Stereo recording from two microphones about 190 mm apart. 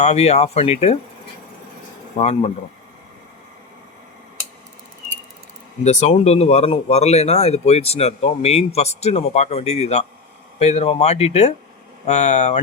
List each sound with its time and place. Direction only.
0.0 s speech: 35° left (ahead or behind)
2.1 s speech: 35° left (ahead or behind)
5.8 s speech: 35° left (ahead or behind)